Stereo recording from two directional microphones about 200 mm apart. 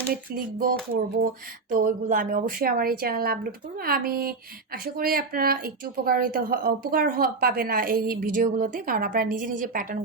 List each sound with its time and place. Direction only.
0.1 s speech: 45° right (ahead or behind)